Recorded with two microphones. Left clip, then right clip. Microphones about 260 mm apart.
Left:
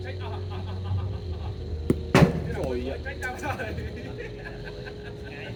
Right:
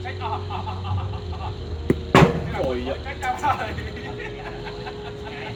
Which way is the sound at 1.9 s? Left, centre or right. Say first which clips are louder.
Right 4 dB; centre.